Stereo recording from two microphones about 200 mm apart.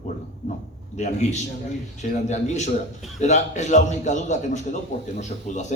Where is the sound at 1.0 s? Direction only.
35° left (ahead or behind).